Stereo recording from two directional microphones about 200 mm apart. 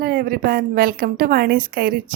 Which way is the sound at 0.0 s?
45° right (ahead or behind).